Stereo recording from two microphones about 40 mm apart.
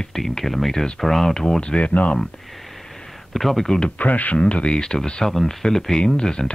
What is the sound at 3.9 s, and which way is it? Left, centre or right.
Speech, left.